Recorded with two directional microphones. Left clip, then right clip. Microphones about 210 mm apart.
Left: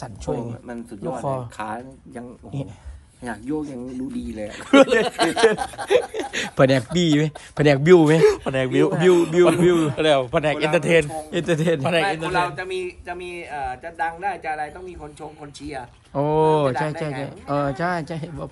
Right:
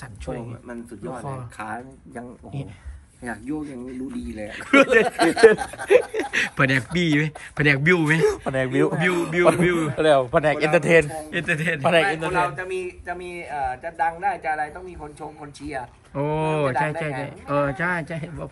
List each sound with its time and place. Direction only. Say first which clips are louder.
0.3 s speech: left 5 dB; 30° left (ahead or behind)
2.1 s a man's voice: left 2 dB; 15° left (ahead or behind)
11.4 s speech: left 3 dB; 15° left (ahead or behind)
11.8 s a man's voice: right 2 dB; centre (ahead or behind)